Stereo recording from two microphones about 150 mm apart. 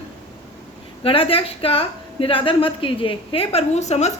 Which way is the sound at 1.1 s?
40° left (ahead or behind).